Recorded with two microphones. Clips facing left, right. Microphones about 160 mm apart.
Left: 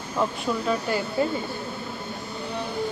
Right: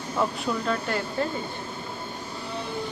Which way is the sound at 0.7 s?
5° left (ahead or behind).